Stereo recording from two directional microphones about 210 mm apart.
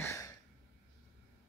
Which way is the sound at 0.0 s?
15° left (ahead or behind).